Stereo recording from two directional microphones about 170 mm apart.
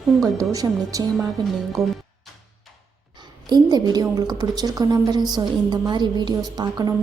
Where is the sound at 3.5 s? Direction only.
25° right (ahead or behind).